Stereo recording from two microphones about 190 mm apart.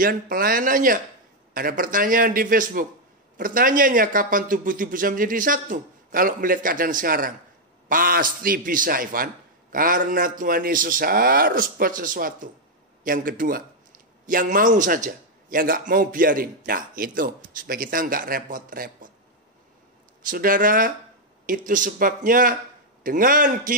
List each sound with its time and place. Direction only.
0.0 s a man's voice: 50° right (ahead or behind)
20.2 s a man's voice: 45° right (ahead or behind)